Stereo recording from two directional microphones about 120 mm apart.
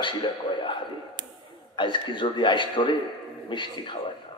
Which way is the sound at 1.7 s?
40° left (ahead or behind).